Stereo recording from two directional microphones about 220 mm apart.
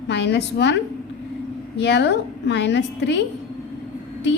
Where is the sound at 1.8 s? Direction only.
50° left (ahead or behind).